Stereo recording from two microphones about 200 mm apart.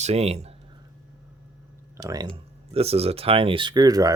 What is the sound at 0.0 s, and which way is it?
Speech, 30° right (ahead or behind).